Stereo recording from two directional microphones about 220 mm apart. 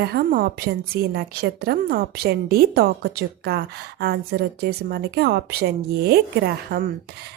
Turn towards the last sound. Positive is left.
turn(degrees=-45)  # may be behind; listen again after turning